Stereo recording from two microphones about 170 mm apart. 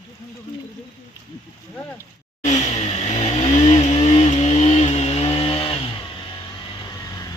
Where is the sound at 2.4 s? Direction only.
40° left (ahead or behind).